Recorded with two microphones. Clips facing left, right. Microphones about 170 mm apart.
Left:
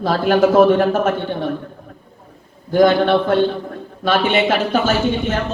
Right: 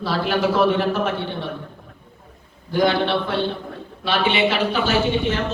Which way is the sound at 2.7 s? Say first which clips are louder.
Left 6 dB; 45° left (ahead or behind).